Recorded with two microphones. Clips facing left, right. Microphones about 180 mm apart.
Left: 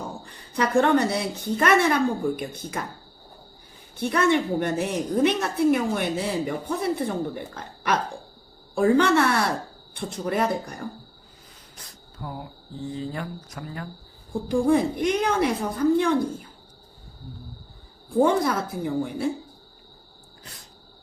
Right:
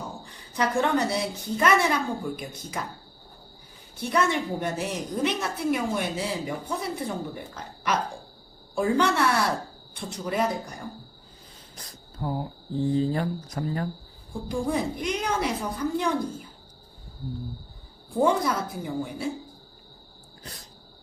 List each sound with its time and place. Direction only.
0.5 s a woman's voice: 60° left (ahead or behind)
4.0 s a woman's voice: 60° left (ahead or behind)
12.2 s speech: 30° right (ahead or behind)
14.4 s a woman's voice: 55° left (ahead or behind)
18.2 s a woman's voice: 55° left (ahead or behind)